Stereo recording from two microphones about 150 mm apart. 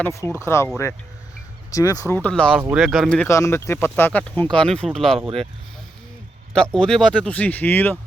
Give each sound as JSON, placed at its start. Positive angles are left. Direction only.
{"t": 0.0, "sound": "speech", "side_deg": 15}
{"t": 1.7, "sound": "speech", "side_deg": 25}
{"t": 2.1, "sound": "speech", "side_deg": 10}
{"t": 2.6, "sound": "speech", "side_deg": -15}
{"t": 2.8, "sound": "speech", "side_deg": 0}
{"t": 3.2, "sound": "speech", "side_deg": 20}
{"t": 6.5, "sound": "speech", "side_deg": 5}